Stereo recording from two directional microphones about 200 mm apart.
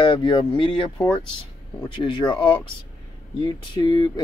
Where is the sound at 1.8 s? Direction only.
20° left (ahead or behind).